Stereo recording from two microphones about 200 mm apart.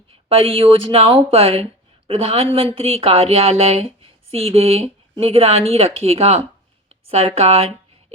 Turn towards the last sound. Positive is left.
turn(degrees=-30)  # may be behind; listen again after turning